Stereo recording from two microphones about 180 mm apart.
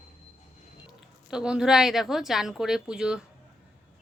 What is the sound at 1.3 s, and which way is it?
Speech, 5° right (ahead or behind).